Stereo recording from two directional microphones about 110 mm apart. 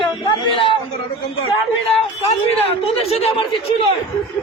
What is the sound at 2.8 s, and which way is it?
Speech, 65° left (ahead or behind).